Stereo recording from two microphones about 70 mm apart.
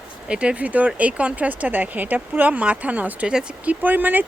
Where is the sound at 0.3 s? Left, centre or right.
Centre.